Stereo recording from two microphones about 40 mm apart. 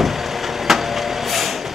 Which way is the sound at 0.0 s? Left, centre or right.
Centre.